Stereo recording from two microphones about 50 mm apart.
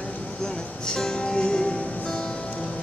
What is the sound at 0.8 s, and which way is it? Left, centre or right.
Music, centre.